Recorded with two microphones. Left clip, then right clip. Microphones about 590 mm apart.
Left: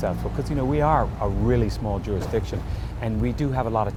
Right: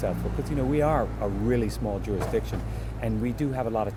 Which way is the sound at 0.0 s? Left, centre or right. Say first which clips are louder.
Left 3 dB; centre.